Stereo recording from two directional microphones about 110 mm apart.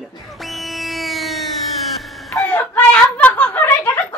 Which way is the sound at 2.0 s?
Centre (ahead or behind).